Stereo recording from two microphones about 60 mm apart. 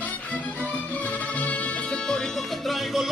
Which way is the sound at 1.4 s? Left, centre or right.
Left.